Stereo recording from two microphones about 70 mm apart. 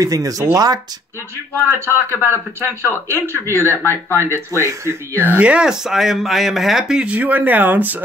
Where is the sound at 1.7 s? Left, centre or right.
Right.